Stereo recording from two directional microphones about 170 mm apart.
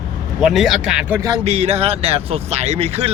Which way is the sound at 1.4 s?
40° right (ahead or behind).